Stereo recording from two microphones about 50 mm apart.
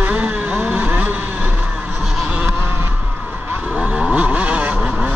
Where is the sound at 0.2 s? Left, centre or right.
Right.